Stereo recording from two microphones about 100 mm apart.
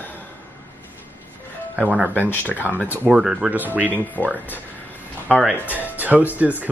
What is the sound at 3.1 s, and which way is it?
Speech, 5° right (ahead or behind).